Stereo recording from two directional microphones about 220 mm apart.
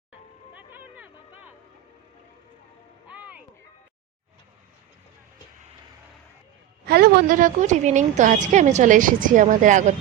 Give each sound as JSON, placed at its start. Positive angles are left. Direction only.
{"t": 0.5, "sound": "a sound", "side_deg": -10}
{"t": 3.2, "sound": "music", "side_deg": -5}
{"t": 6.8, "sound": "a woman's voice", "side_deg": -45}